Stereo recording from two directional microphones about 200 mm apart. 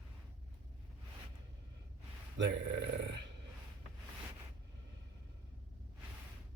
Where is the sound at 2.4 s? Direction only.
65° right (ahead or behind).